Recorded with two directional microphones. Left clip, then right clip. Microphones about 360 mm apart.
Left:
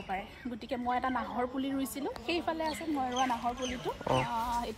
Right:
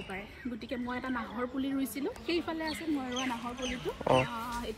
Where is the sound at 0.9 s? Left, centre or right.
Left.